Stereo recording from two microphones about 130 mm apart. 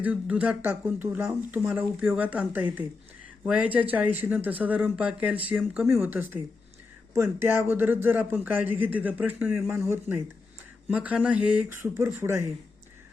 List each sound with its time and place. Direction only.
0.0 s speech: 10° right (ahead or behind)
10.8 s speech: 10° right (ahead or behind)
11.7 s speech: 20° right (ahead or behind)